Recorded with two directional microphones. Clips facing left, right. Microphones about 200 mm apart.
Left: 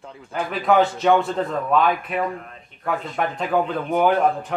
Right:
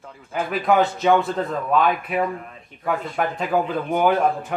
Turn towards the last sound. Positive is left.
turn(degrees=0)  # may be behind; listen again after turning